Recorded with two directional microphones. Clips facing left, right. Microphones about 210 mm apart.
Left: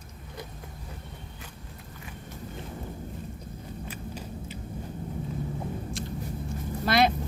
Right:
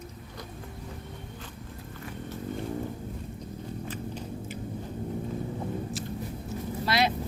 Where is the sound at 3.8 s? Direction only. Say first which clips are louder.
Right 2 dB; 10° left (ahead or behind).